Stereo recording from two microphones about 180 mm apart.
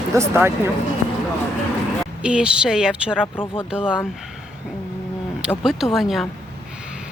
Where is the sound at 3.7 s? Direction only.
10° left (ahead or behind).